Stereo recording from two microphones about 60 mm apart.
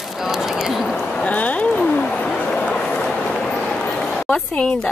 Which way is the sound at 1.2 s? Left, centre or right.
Left.